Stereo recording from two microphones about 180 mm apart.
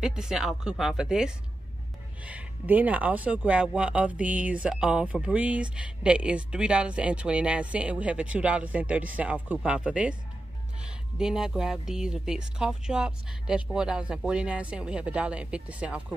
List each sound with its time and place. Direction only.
0.0 s speech: 5° right (ahead or behind)
11.1 s speech: 5° right (ahead or behind)